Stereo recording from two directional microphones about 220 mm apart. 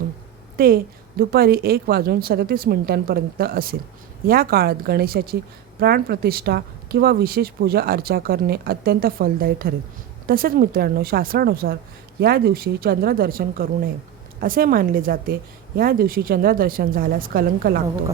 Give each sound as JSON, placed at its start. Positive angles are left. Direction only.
{"t": 0.5, "sound": "a woman's voice", "side_deg": -40}